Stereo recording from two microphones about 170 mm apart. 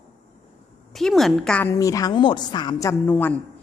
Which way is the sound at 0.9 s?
Centre (ahead or behind).